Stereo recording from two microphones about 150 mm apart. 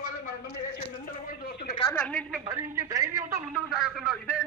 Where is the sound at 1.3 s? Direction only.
90° left.